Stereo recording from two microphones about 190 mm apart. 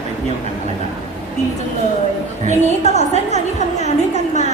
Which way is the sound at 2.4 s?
35° left (ahead or behind).